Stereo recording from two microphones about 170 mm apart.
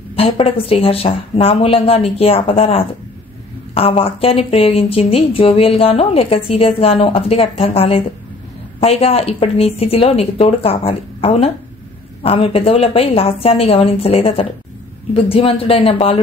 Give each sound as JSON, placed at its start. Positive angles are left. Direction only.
{"t": 0.1, "sound": "speech", "side_deg": 35}